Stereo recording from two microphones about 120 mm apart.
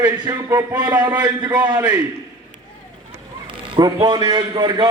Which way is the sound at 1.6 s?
35° right (ahead or behind).